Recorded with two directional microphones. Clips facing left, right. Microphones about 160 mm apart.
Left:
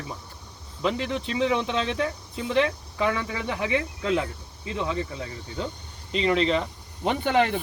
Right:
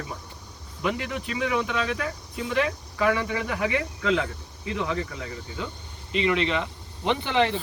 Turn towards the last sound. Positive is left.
turn(degrees=50)  # may be behind; listen again after turning